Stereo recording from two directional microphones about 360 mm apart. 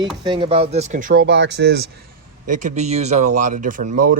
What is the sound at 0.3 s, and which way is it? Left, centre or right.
Speech, centre.